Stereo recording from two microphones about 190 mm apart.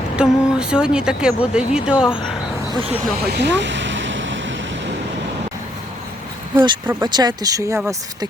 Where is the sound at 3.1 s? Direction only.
55° right (ahead or behind); by 4.9 s 70° right (ahead or behind).